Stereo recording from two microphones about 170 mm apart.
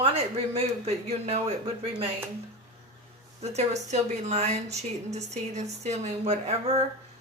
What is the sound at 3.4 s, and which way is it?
Speech, 40° right (ahead or behind).